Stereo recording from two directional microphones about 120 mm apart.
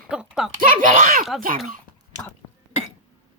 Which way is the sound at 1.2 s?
Centre (ahead or behind).